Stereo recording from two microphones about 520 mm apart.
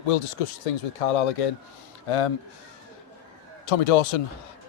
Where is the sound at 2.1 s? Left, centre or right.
Left.